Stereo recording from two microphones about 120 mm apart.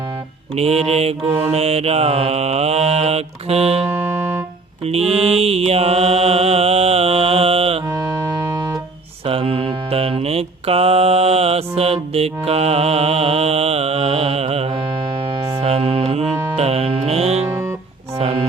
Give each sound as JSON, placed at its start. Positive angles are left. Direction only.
{"t": 0.5, "sound": "mantra", "side_deg": -60}
{"t": 7.9, "sound": "organ", "side_deg": -25}
{"t": 9.2, "sound": "mantra", "side_deg": -50}
{"t": 15.6, "sound": "music", "side_deg": -55}
{"t": 17.4, "sound": "music", "side_deg": -20}